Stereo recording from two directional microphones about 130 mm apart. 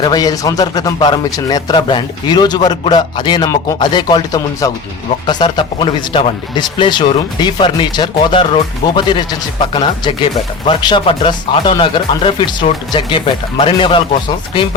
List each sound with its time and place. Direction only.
0.0 s a man's voice: 30° left (ahead or behind)